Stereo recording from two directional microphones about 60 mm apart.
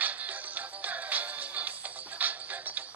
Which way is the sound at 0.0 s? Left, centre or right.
Right.